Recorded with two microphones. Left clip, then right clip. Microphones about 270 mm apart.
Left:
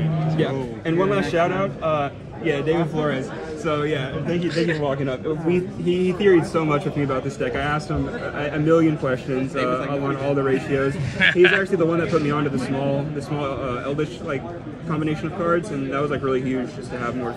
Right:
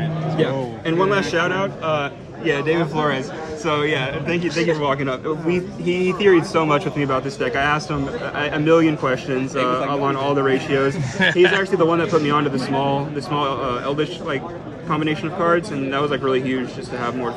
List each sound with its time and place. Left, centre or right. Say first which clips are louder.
0.9 s a man's voice: right 2 dB; centre
3.6 s a man's voice: right 3 dB; right
4.3 s a man's voice: right 2 dB; centre